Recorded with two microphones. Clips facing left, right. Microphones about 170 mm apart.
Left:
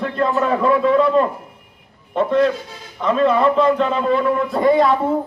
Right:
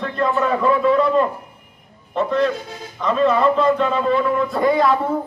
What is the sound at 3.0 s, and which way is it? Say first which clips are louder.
Speech: left 1 dB; 30° left (ahead or behind).